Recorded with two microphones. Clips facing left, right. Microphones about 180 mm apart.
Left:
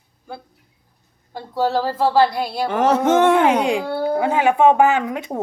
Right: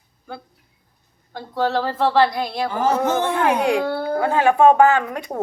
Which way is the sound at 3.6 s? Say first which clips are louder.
Even; 15° left (ahead or behind).